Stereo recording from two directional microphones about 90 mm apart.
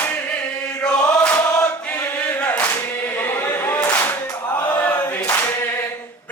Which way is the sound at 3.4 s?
30° left (ahead or behind).